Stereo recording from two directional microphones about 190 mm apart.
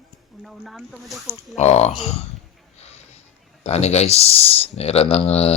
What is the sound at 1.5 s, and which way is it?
Speech, 35° left (ahead or behind).